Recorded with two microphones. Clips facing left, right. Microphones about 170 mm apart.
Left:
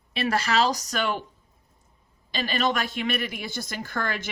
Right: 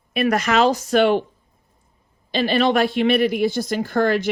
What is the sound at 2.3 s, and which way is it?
Speech, 45° left (ahead or behind).